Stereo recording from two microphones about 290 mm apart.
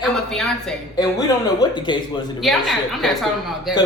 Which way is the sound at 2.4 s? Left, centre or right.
Centre.